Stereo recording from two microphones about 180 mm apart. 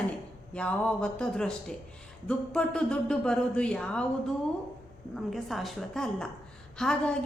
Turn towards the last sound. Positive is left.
turn(degrees=5)  # may be behind; listen again after turning